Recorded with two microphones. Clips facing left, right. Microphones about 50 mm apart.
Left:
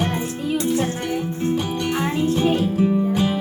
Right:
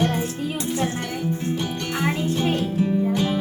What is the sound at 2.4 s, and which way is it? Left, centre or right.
Music, centre.